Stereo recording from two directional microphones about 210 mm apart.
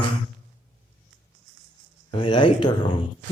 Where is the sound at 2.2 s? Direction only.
20° left (ahead or behind).